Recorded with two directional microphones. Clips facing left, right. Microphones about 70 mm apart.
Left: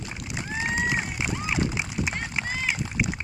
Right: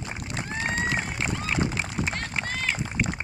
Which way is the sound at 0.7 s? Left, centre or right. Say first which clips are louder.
Left 2 dB; centre.